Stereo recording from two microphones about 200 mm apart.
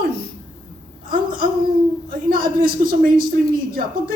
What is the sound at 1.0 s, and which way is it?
A woman's voice, 45° right (ahead or behind).